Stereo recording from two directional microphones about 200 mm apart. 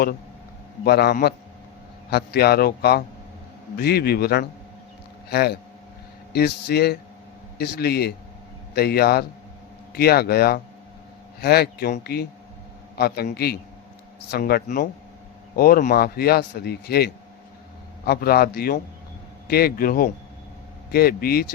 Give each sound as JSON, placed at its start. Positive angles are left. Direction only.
{"t": 0.9, "sound": "a man's voice", "side_deg": 55}